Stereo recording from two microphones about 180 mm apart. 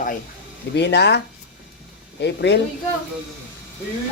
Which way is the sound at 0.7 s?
70° left (ahead or behind).